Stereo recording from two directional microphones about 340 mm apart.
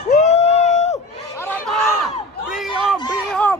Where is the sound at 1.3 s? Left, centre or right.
Centre.